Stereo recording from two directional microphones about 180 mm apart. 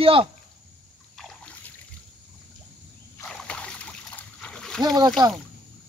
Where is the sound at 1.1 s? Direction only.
Centre (ahead or behind).